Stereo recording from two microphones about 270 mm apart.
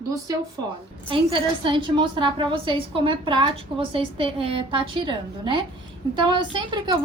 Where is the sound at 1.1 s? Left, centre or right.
Centre.